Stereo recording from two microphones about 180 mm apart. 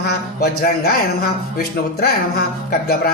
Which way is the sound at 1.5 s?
60° left (ahead or behind).